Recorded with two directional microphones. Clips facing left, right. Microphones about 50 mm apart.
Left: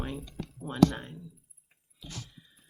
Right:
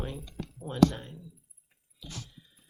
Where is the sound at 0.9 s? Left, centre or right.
Left.